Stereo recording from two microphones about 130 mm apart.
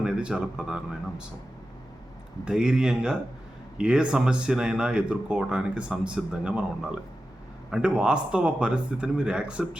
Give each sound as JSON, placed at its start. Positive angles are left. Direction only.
{"t": 0.0, "sound": "speech", "side_deg": -10}
{"t": 2.4, "sound": "speech", "side_deg": -5}
{"t": 7.7, "sound": "speech", "side_deg": -10}